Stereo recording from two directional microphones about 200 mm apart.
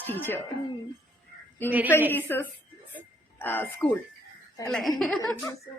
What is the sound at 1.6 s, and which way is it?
A woman's voice, 10° left (ahead or behind).